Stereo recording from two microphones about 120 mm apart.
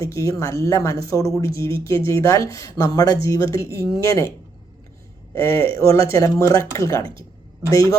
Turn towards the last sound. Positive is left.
turn(degrees=25)  # may be behind; listen again after turning